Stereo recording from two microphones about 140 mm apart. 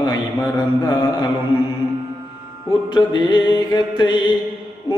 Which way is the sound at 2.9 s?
35° left (ahead or behind).